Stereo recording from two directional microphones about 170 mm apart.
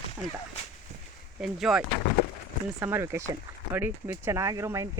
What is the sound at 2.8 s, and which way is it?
Speech, 15° right (ahead or behind).